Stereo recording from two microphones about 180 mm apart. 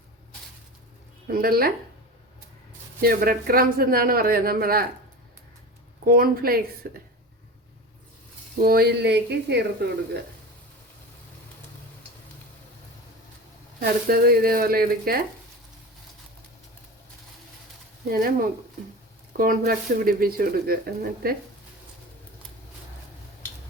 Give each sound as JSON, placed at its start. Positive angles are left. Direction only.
{"t": 1.3, "sound": "speech", "side_deg": -55}
{"t": 3.0, "sound": "speech", "side_deg": -55}
{"t": 6.1, "sound": "speech", "side_deg": -55}
{"t": 8.5, "sound": "speech", "side_deg": -55}
{"t": 13.7, "sound": "speech", "side_deg": -60}
{"t": 18.1, "sound": "speech", "side_deg": -55}